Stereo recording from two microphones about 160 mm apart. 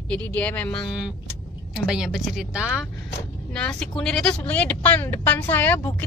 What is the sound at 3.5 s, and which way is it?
Speech, 5° left (ahead or behind).